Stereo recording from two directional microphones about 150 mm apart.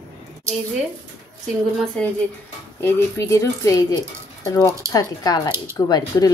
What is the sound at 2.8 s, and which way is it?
Speech, 15° left (ahead or behind).